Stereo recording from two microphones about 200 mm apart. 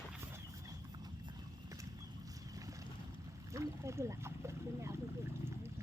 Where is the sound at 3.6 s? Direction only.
15° right (ahead or behind).